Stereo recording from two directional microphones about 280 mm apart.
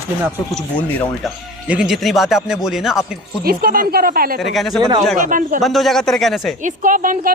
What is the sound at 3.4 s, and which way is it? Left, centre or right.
Speech, right.